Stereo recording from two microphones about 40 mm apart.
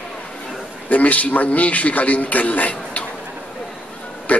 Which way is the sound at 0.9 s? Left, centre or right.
Left.